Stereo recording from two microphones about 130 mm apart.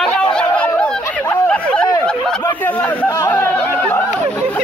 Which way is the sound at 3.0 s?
20° left (ahead or behind).